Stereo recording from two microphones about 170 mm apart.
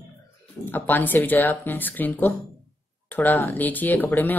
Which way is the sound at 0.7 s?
10° left (ahead or behind).